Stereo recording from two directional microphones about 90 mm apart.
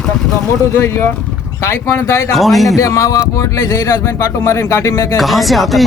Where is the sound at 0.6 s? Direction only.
30° left (ahead or behind).